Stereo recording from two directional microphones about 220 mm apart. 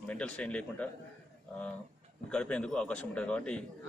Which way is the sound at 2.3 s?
5° left (ahead or behind).